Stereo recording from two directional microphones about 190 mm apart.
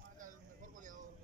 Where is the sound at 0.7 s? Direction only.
40° right (ahead or behind).